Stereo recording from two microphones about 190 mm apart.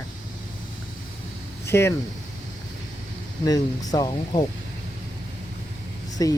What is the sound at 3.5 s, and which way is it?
Speech, 20° left (ahead or behind).